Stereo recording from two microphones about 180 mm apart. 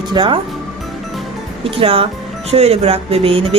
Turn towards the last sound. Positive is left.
turn(degrees=-30)  # may be behind; listen again after turning